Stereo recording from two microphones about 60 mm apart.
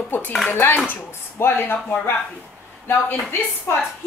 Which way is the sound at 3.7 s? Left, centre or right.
Left.